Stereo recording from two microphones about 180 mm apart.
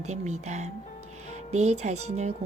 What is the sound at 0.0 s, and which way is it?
Speech, 40° right (ahead or behind).